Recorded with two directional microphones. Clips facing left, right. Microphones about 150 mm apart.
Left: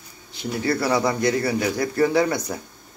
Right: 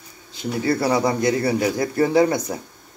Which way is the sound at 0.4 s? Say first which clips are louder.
Right 2 dB; 25° right (ahead or behind).